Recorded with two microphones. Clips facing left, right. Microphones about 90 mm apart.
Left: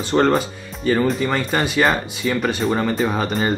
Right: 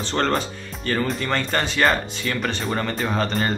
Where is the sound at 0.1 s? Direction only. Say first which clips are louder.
Left 6 dB; 10° left (ahead or behind).